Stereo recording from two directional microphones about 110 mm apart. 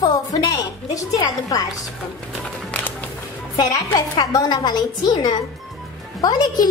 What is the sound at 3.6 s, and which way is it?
A woman's voice, 40° left (ahead or behind).